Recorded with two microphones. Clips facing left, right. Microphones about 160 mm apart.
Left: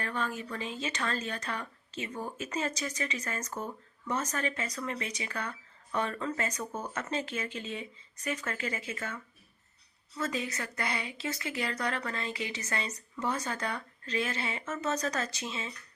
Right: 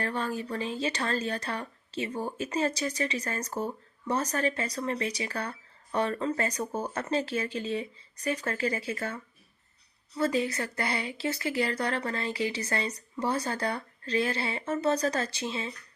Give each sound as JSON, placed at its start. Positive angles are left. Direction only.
{"t": 0.0, "sound": "speech", "side_deg": -35}